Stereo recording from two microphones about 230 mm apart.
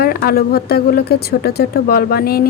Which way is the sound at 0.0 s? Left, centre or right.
Left.